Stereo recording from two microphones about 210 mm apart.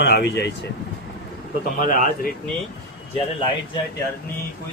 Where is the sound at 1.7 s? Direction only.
40° left (ahead or behind).